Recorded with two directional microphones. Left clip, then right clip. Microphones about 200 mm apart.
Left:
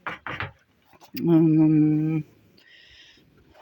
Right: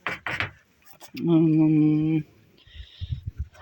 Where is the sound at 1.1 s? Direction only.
10° left (ahead or behind).